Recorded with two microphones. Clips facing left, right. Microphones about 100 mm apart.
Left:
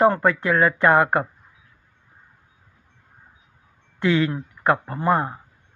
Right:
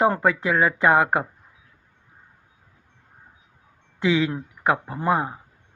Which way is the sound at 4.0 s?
15° right (ahead or behind).